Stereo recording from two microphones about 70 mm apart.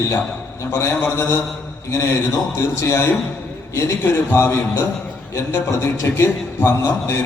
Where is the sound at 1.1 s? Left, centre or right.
Left.